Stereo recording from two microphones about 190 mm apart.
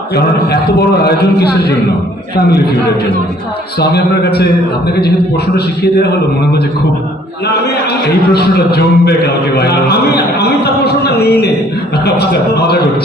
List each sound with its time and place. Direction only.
3.8 s a man's voice: 60° left (ahead or behind)
5.5 s a man's voice: 60° left (ahead or behind)
8.3 s a man's voice: 55° left (ahead or behind)